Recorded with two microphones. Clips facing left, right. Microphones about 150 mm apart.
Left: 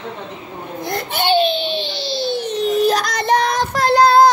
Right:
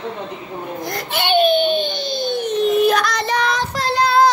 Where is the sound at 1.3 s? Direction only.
30° left (ahead or behind).